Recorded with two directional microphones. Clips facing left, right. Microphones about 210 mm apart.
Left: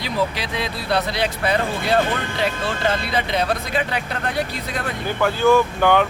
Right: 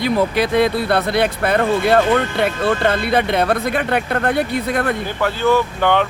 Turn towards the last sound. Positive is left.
turn(degrees=0)  # may be behind; listen again after turning